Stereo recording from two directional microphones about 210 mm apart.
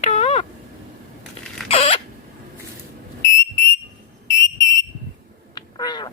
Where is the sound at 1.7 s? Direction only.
25° left (ahead or behind).